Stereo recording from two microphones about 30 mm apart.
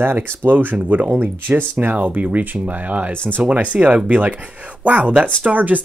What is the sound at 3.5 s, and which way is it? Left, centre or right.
Speech, right.